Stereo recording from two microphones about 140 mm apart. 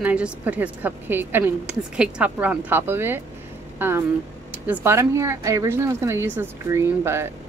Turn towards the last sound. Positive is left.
turn(degrees=-15)  # may be behind; listen again after turning